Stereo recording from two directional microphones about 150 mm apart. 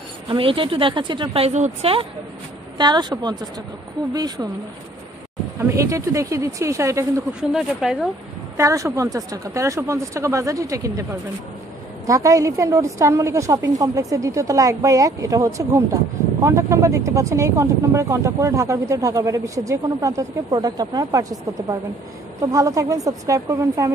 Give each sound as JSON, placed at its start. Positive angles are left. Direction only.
{"t": 0.3, "sound": "speech", "side_deg": -35}
{"t": 2.8, "sound": "a woman's voice", "side_deg": -30}
{"t": 5.6, "sound": "a woman's voice", "side_deg": -20}
{"t": 7.5, "sound": "speech", "side_deg": -5}
{"t": 8.5, "sound": "a woman's voice", "side_deg": -20}